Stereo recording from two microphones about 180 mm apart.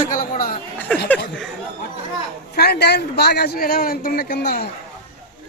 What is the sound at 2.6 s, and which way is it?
A man's voice, 65° left (ahead or behind).